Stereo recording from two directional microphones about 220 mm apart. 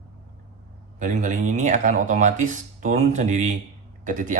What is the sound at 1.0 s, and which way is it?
Speech, 35° right (ahead or behind).